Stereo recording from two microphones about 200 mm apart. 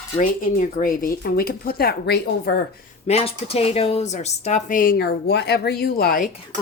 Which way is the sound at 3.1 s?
30° left (ahead or behind).